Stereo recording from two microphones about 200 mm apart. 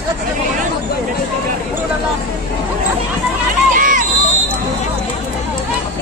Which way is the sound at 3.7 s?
40° right (ahead or behind).